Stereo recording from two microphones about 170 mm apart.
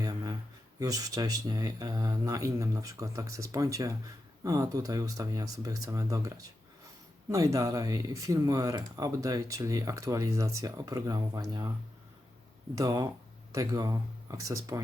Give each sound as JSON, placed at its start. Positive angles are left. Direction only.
{"t": 0.0, "sound": "a sound", "side_deg": -20}
{"t": 0.8, "sound": "speech", "side_deg": -20}
{"t": 12.7, "sound": "speech", "side_deg": -20}